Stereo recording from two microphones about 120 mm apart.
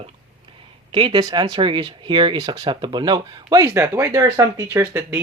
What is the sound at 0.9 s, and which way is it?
Speech, 40° right (ahead or behind).